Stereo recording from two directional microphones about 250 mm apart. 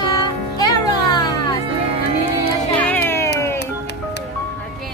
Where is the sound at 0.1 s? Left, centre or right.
Centre.